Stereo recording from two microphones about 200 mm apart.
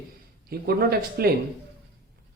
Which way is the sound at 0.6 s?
50° right (ahead or behind).